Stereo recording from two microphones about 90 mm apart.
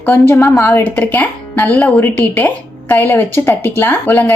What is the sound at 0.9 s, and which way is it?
A woman's voice, 20° left (ahead or behind).